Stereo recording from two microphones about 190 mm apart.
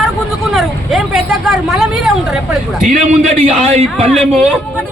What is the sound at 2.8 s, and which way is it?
A man's voice, 40° right (ahead or behind).